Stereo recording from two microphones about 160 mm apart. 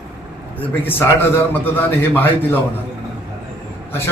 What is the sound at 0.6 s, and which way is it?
A man's voice, 10° left (ahead or behind).